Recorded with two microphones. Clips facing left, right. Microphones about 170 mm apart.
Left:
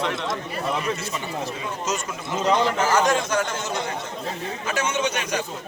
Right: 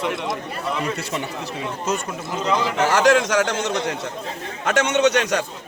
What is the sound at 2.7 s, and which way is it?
A man's voice, 75° right (ahead or behind).